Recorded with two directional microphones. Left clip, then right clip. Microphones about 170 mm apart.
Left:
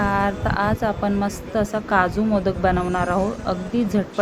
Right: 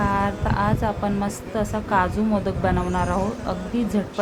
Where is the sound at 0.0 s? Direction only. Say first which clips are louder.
Left 2 dB; 20° left (ahead or behind).